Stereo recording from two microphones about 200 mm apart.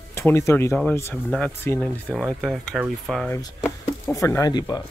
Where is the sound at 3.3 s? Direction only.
15° left (ahead or behind).